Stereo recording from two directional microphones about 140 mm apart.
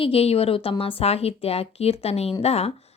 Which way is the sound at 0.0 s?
45° left (ahead or behind).